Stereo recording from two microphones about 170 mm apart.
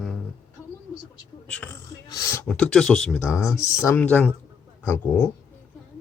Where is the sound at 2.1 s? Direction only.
20° left (ahead or behind).